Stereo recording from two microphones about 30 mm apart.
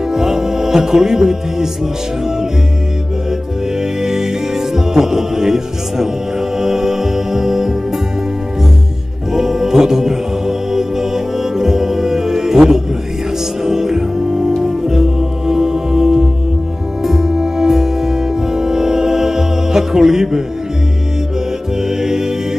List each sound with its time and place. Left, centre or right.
0.1 s music: centre
4.0 s music: centre
9.3 s music: centre
21.8 s music: centre